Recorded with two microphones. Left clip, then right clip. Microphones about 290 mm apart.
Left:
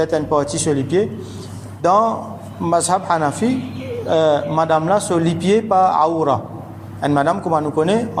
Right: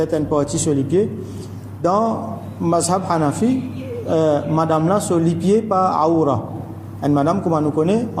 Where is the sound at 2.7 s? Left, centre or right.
Left.